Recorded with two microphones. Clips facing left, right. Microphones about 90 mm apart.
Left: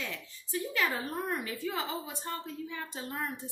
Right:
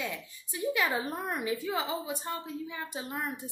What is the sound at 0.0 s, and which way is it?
A woman's voice, 15° right (ahead or behind).